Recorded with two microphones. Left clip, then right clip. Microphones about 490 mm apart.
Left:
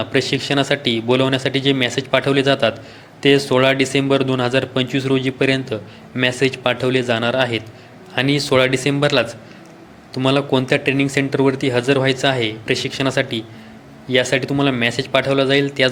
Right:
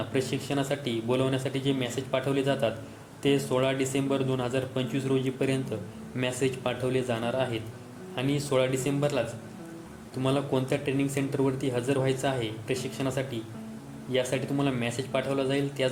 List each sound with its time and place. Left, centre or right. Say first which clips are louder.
0.0 s speech: left 11 dB; right